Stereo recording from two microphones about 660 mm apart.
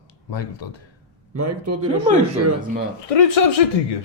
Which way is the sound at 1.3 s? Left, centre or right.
Right.